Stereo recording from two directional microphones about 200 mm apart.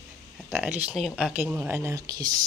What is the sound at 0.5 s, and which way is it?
Speech, 5° right (ahead or behind).